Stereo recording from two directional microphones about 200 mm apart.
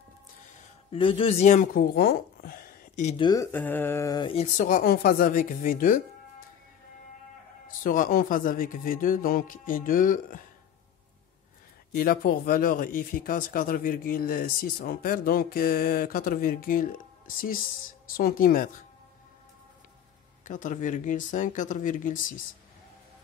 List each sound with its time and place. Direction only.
0.9 s speech: 25° left (ahead or behind)
3.2 s speech: 20° left (ahead or behind)
3.5 s mantra: 10° left (ahead or behind); by 4.5 s 25° left (ahead or behind)
4.6 s speech: 45° left (ahead or behind)
7.6 s speech: 45° left (ahead or behind)
11.9 s speech: 50° left (ahead or behind)
20.4 s speech: 40° left (ahead or behind)